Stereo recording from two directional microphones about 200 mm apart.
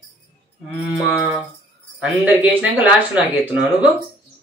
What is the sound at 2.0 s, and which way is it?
Speech, 5° right (ahead or behind).